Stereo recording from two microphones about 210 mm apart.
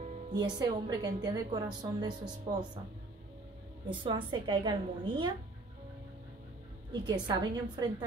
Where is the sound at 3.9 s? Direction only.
25° right (ahead or behind).